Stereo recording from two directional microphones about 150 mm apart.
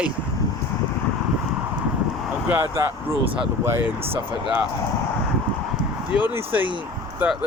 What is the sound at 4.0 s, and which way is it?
Speech, 40° right (ahead or behind).